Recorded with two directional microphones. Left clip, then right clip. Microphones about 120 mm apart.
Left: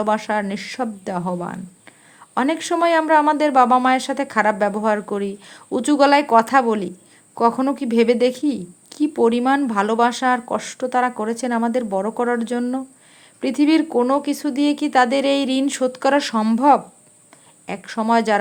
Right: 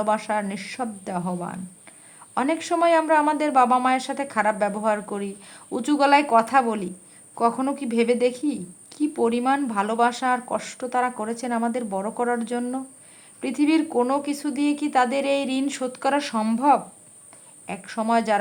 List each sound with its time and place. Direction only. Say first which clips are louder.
0.0 s a woman's voice: left 3 dB; 35° left (ahead or behind)
16.6 s a woman's voice: left 4 dB; 45° left (ahead or behind)